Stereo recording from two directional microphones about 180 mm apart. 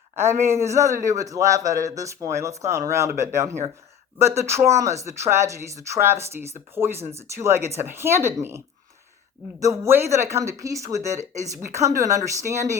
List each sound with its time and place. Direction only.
0.2 s speech: 15° right (ahead or behind)